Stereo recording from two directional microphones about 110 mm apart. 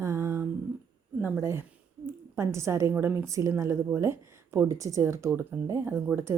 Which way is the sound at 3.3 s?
30° right (ahead or behind).